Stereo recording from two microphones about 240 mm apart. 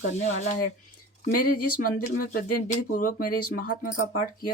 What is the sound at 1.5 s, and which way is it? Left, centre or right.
Speech, left.